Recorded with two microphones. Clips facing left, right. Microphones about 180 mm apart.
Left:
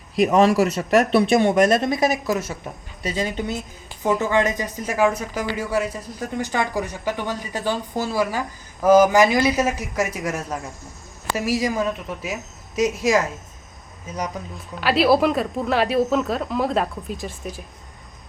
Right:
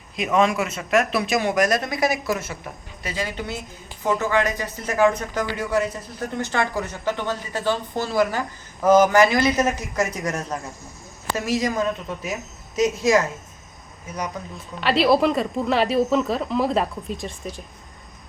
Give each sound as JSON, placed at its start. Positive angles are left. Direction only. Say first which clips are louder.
{"t": 0.2, "sound": "speech", "louder": "left 4 dB", "side_deg": 35}
{"t": 14.8, "sound": "speech", "louder": "left 1 dB", "side_deg": 0}